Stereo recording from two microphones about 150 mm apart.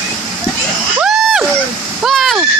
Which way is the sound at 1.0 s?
Centre (ahead or behind).